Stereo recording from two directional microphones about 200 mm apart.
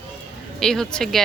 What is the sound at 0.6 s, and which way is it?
Speech, centre (ahead or behind).